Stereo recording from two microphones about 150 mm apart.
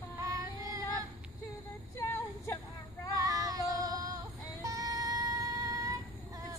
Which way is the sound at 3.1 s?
25° right (ahead or behind).